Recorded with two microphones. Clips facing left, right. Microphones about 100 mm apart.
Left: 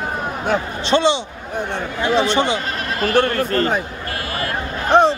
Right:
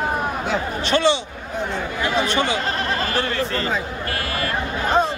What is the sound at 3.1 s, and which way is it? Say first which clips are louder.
Speech: left 6 dB; 55° left (ahead or behind).